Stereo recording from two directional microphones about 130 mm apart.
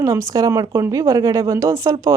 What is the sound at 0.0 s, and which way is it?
Speech, 25° right (ahead or behind).